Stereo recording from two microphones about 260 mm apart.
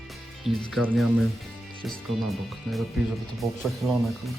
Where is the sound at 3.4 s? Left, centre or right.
Centre.